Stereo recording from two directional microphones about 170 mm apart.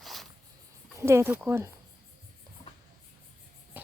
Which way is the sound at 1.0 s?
15° right (ahead or behind).